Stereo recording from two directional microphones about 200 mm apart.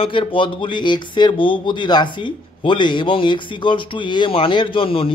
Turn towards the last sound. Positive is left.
turn(degrees=25)  # may be behind; listen again after turning